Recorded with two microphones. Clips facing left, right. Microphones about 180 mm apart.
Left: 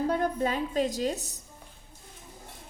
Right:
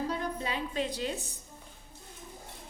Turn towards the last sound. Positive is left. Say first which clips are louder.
# left 5 dB
turn(degrees=40)  # may be behind; listen again after turning